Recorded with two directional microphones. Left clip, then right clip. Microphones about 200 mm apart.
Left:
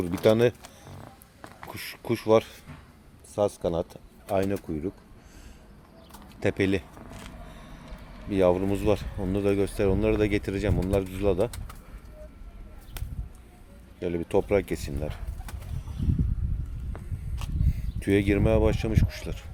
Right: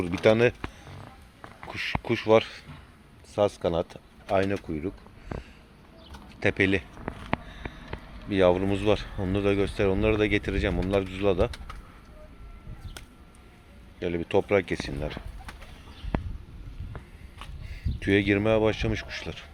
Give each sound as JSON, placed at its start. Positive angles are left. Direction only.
{"t": 0.0, "sound": "speech", "side_deg": 15}
{"t": 6.4, "sound": "speech", "side_deg": 15}
{"t": 8.3, "sound": "speech", "side_deg": 10}
{"t": 14.0, "sound": "speech", "side_deg": 10}
{"t": 18.0, "sound": "speech", "side_deg": 10}